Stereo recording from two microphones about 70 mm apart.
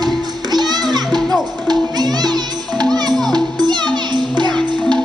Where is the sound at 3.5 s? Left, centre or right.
Right.